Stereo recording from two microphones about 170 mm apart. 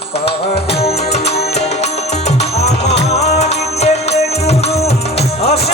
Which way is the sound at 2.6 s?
40° left (ahead or behind).